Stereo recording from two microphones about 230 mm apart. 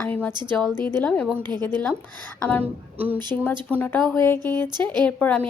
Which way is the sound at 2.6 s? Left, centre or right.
Right.